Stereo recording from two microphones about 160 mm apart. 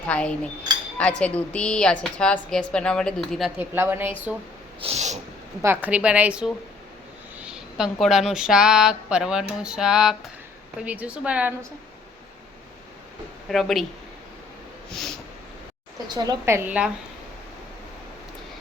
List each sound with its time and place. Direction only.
0.1 s a woman's voice: 5° left (ahead or behind)
3.6 s a woman's voice: 15° right (ahead or behind)
4.8 s snort: 40° right (ahead or behind)
5.6 s a woman's voice: 10° right (ahead or behind)
13.5 s speech: centre (ahead or behind)
16.0 s a woman's voice: 25° right (ahead or behind); by 16.9 s 10° right (ahead or behind)